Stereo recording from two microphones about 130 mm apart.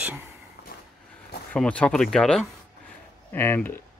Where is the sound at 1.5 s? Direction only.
10° left (ahead or behind).